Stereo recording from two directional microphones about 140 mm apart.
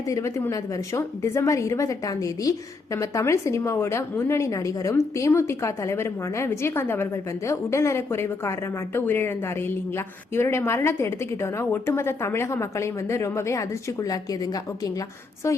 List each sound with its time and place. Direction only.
0.1 s a woman's voice: 20° left (ahead or behind)